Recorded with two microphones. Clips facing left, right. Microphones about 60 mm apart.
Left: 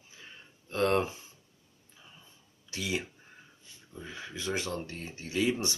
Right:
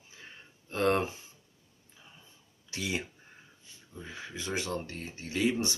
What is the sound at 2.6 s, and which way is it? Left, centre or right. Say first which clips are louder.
Speech: left 1 dB; right.